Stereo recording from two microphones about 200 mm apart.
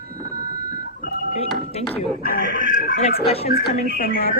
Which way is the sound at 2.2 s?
45° left (ahead or behind).